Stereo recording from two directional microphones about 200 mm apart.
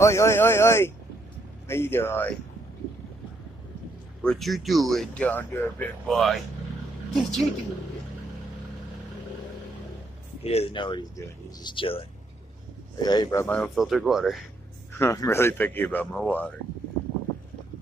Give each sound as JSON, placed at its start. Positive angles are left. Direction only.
{"t": 0.0, "sound": "speech", "side_deg": 15}
{"t": 4.2, "sound": "speech", "side_deg": 5}
{"t": 10.4, "sound": "speech", "side_deg": 30}
{"t": 13.4, "sound": "speech", "side_deg": 5}
{"t": 14.9, "sound": "speech", "side_deg": 15}